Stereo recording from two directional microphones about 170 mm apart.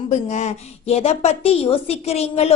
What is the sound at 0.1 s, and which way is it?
A woman's voice, 45° left (ahead or behind).